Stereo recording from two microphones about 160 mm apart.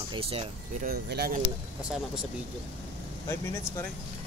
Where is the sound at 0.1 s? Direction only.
35° right (ahead or behind).